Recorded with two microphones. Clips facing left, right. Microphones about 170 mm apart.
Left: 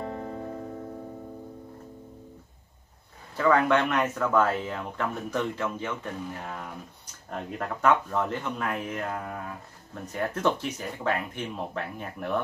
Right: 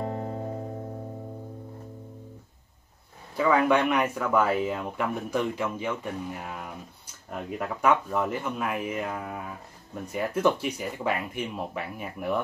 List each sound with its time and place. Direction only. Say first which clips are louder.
0.1 s music: right 2 dB; 35° right (ahead or behind)
3.3 s speech: even; 10° right (ahead or behind)